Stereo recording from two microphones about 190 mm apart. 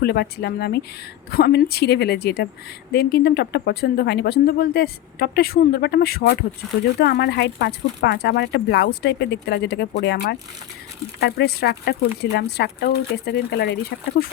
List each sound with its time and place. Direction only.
0.0 s speech: 60° left (ahead or behind)